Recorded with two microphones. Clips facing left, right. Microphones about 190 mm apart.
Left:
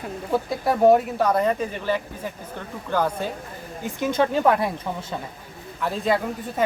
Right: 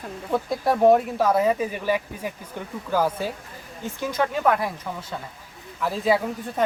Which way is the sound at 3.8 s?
25° left (ahead or behind).